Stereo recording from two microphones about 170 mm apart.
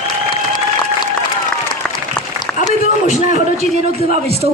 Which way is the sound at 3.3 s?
40° right (ahead or behind).